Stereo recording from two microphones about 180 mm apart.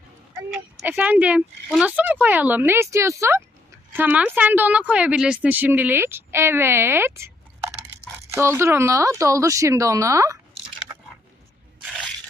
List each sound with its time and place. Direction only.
0.8 s a woman's voice: 10° right (ahead or behind)
8.3 s a woman's voice: 15° right (ahead or behind)
11.8 s scrape: centre (ahead or behind)